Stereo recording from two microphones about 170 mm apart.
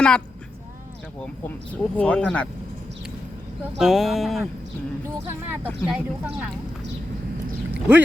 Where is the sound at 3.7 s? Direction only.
Centre (ahead or behind).